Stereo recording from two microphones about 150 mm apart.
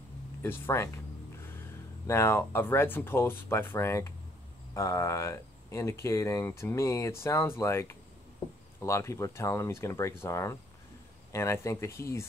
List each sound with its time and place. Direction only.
0.4 s speech: 15° left (ahead or behind)
2.0 s speech: 15° left (ahead or behind)